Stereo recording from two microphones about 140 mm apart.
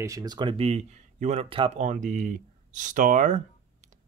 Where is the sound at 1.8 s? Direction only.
65° right (ahead or behind).